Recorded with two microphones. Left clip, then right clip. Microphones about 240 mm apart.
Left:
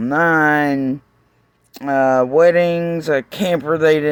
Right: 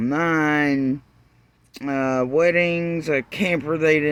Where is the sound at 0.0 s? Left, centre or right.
Centre.